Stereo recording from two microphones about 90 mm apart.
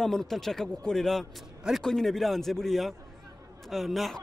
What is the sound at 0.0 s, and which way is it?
A man's voice, 5° left (ahead or behind).